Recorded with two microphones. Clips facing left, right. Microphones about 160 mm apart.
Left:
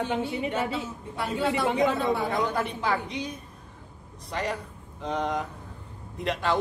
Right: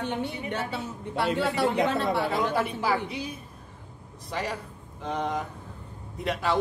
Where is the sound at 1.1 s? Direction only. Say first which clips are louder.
Right 1 dB; 75° right (ahead or behind).